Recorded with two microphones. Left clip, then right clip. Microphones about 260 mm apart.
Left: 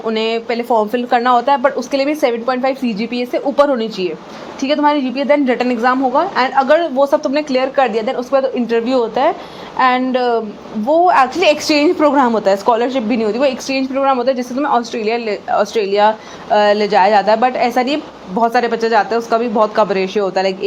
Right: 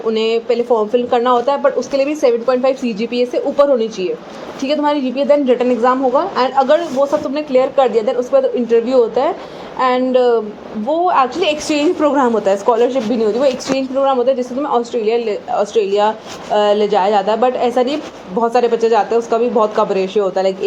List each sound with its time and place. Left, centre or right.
0.0 s a woman's voice: left